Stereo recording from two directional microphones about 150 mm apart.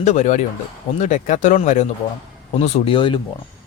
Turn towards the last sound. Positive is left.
turn(degrees=35)  # may be behind; listen again after turning